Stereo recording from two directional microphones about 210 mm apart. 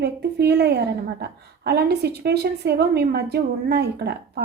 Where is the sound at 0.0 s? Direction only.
50° right (ahead or behind).